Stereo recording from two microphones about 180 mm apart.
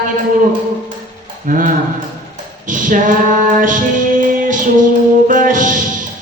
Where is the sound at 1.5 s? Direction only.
50° right (ahead or behind).